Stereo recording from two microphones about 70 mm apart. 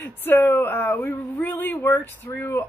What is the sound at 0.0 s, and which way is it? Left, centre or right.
Speech, left.